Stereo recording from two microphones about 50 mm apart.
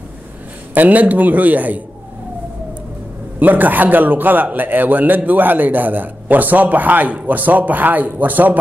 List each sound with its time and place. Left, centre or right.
0.7 s a man's voice: right
3.3 s a man's voice: right